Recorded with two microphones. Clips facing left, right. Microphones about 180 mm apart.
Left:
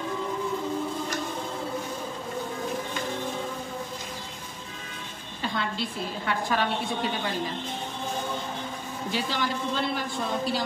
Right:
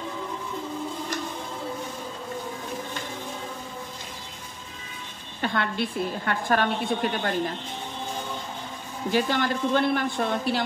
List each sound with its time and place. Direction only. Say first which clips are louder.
5.4 s a woman's voice: right 4 dB; 60° right (ahead or behind)
9.1 s a woman's voice: right 6 dB; 55° right (ahead or behind)